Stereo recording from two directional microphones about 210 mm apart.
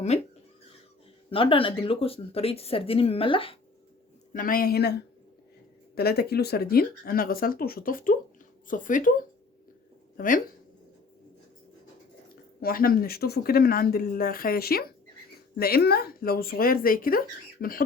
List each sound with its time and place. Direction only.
0.1 s speech: 30° left (ahead or behind)
1.3 s speech: 25° left (ahead or behind)
4.3 s speech: 40° left (ahead or behind)
10.2 s speech: 40° left (ahead or behind)
12.5 s speech: 45° left (ahead or behind)